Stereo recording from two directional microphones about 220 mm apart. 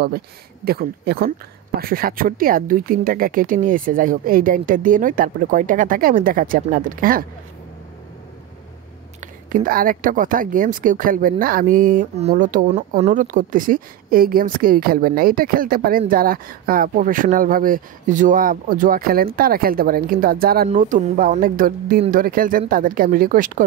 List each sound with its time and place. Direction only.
0.7 s a woman's voice: 45° right (ahead or behind)
9.2 s a woman's voice: 40° right (ahead or behind)